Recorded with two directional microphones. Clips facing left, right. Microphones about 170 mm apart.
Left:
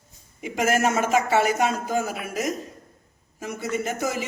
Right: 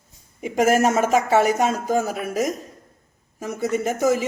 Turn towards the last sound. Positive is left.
turn(degrees=-45)  # may be behind; listen again after turning